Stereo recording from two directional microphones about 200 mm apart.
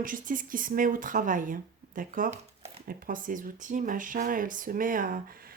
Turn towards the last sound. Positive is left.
turn(degrees=-45)  # may be behind; listen again after turning